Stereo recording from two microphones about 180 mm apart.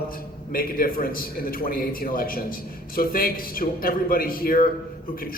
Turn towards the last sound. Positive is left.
turn(degrees=55)  # may be behind; listen again after turning